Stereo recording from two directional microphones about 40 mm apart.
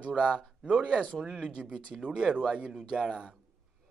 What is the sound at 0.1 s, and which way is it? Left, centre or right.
Speech, centre.